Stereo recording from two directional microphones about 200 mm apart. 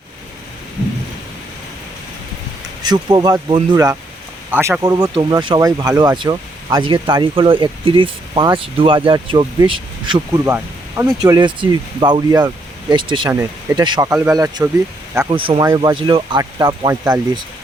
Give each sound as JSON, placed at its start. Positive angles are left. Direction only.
{"t": 2.8, "sound": "speech", "side_deg": -20}
{"t": 10.4, "sound": "speech", "side_deg": -10}
{"t": 13.3, "sound": "speech", "side_deg": -15}
{"t": 15.4, "sound": "speech", "side_deg": -25}